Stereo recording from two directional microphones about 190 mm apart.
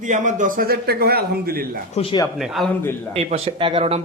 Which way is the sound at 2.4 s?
Centre (ahead or behind).